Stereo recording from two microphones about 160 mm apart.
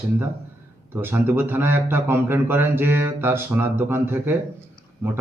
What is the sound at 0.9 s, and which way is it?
A man's voice, 15° right (ahead or behind).